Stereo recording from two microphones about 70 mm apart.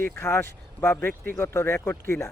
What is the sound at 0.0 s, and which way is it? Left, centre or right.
Speech, left.